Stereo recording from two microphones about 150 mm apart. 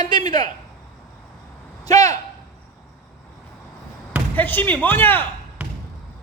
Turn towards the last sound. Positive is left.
turn(degrees=-10)  # may be behind; listen again after turning